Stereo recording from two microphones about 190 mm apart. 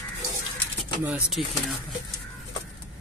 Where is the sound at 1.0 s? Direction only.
5° right (ahead or behind).